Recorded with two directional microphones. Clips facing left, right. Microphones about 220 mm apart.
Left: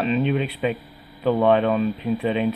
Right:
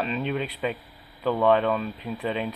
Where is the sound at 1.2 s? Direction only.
15° left (ahead or behind).